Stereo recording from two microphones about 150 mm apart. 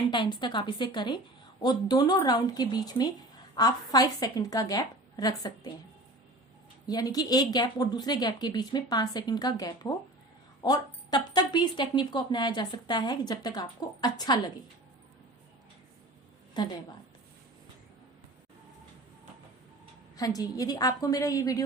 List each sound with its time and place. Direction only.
0.1 s a woman's voice: 30° left (ahead or behind)
6.8 s speech: 25° left (ahead or behind)
16.6 s speech: 30° left (ahead or behind)
20.1 s speech: 25° left (ahead or behind)